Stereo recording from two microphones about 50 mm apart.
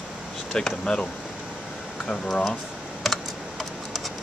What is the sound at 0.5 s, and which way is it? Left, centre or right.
Speech, centre.